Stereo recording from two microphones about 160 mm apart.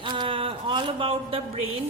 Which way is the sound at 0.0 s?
30° right (ahead or behind).